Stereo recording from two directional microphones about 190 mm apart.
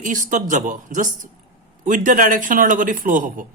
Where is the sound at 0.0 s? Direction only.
45° right (ahead or behind).